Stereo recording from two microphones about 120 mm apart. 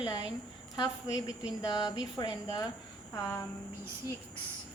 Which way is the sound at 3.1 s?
25° left (ahead or behind).